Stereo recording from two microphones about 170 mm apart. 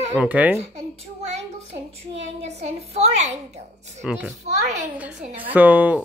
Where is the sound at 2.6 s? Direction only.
40° right (ahead or behind).